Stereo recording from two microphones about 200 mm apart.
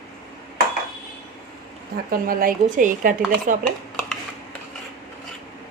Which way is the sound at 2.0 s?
45° right (ahead or behind).